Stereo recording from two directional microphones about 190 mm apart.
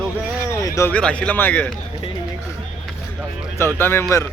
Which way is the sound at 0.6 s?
15° left (ahead or behind).